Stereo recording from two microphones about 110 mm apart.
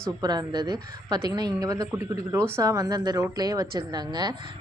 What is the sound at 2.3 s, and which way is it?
A woman's voice, 25° right (ahead or behind).